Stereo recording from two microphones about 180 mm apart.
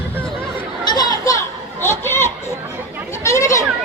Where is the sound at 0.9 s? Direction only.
20° left (ahead or behind).